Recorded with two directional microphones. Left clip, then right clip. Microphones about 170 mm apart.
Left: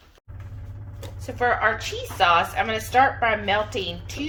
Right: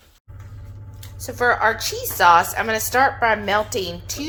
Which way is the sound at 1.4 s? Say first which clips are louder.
Right 3 dB; 35° right (ahead or behind).